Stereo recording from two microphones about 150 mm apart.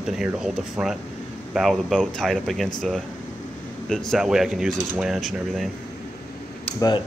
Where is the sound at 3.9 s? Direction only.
Centre (ahead or behind).